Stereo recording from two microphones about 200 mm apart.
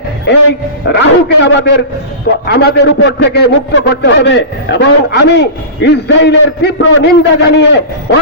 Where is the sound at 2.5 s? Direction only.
55° left (ahead or behind).